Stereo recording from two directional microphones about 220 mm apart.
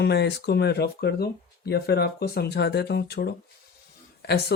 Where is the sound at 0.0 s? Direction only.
50° left (ahead or behind).